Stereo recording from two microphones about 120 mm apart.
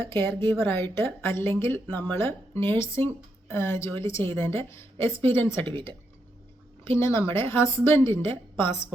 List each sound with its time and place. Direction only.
0.1 s a woman's voice: 20° left (ahead or behind)
5.6 s speech: 45° right (ahead or behind)
6.9 s a woman's voice: 20° left (ahead or behind)